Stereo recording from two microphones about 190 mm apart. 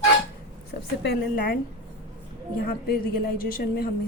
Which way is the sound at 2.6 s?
50° left (ahead or behind).